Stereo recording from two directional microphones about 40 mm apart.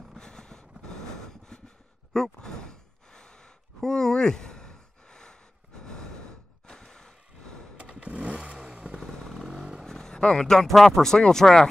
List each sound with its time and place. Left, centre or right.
0.2 s vehicle: centre
2.1 s sigh: centre
6.8 s vehicle: centre
8.0 s vehicle: right
8.7 s motorcycle: right
9.0 s motorcycle: centre
9.8 s vehicle: centre
10.2 s speech: centre